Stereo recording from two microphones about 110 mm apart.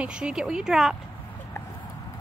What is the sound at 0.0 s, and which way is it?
Speech, 10° right (ahead or behind).